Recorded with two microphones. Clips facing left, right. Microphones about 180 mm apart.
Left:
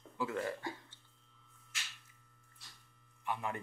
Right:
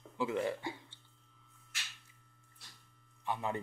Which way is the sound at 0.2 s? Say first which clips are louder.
Right 3 dB; 20° right (ahead or behind).